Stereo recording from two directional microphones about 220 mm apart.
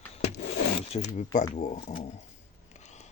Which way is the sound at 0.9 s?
30° left (ahead or behind).